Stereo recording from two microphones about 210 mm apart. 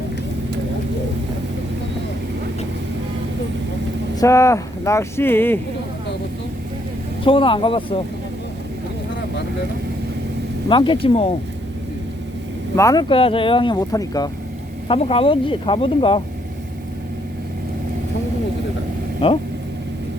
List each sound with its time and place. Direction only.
4.2 s speech: 15° left (ahead or behind)
7.3 s speech: 25° left (ahead or behind)
10.7 s speech: 25° left (ahead or behind)
12.7 s speech: 15° left (ahead or behind)
14.8 s speech: 25° left (ahead or behind)
19.2 s speech: 30° left (ahead or behind)